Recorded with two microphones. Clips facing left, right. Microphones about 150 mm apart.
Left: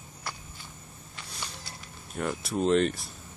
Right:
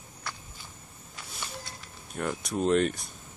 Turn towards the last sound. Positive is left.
turn(degrees=0)  # may be behind; listen again after turning